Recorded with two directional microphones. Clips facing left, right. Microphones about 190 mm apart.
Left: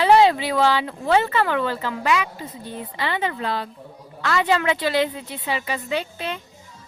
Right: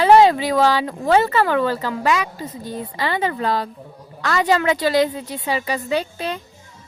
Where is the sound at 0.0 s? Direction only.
45° right (ahead or behind).